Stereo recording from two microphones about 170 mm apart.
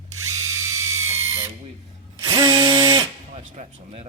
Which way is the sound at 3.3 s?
40° right (ahead or behind).